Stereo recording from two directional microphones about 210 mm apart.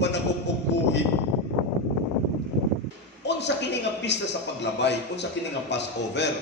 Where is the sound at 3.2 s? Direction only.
55° left (ahead or behind).